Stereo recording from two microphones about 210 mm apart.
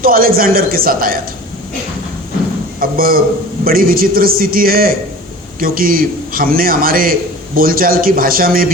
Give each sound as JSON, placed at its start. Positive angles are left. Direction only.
{"t": 0.0, "sound": "a man's voice", "side_deg": -45}
{"t": 2.8, "sound": "a man's voice", "side_deg": -45}